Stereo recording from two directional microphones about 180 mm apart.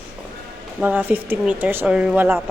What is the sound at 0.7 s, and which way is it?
Speech, 10° right (ahead or behind).